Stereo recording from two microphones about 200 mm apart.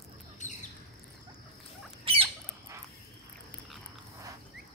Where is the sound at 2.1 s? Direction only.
25° right (ahead or behind).